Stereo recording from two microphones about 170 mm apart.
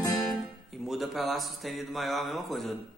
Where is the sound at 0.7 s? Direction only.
Centre (ahead or behind).